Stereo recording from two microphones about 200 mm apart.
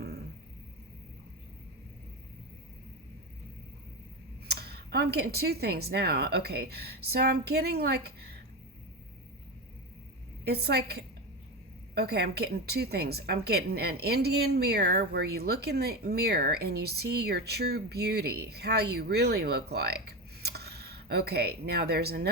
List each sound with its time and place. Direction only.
4.4 s a woman's voice: 55° right (ahead or behind)
10.4 s a woman's voice: 55° right (ahead or behind)